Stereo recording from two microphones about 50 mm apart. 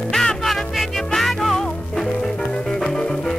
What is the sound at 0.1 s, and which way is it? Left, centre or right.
Music, centre.